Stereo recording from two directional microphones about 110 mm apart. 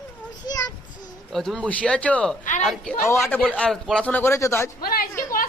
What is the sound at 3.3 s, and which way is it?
Speech, 15° left (ahead or behind).